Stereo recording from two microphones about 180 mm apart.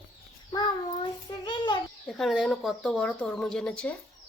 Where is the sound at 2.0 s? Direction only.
Centre (ahead or behind).